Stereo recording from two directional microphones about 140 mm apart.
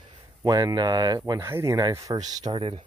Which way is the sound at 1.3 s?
20° right (ahead or behind).